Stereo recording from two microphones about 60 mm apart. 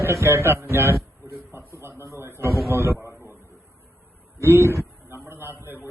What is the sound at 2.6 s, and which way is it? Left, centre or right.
Speech, right.